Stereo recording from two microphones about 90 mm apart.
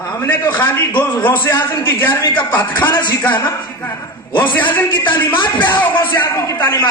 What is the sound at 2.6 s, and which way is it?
Speech, 60° left (ahead or behind).